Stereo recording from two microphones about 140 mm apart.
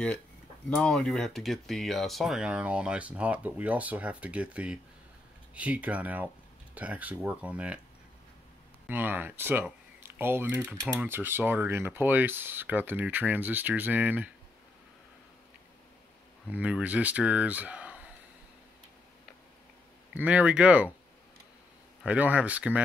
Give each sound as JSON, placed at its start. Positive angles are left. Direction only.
{"t": 0.7, "sound": "speech", "side_deg": 5}
{"t": 8.8, "sound": "speech", "side_deg": -15}
{"t": 16.4, "sound": "speech", "side_deg": -10}
{"t": 20.2, "sound": "speech", "side_deg": -10}
{"t": 22.0, "sound": "speech", "side_deg": -10}